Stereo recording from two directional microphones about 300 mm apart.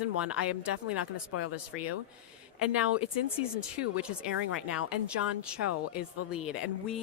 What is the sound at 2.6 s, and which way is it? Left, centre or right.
A woman's voice, centre.